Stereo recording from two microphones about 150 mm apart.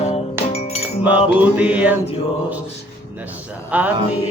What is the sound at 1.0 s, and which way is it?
Music, 10° right (ahead or behind).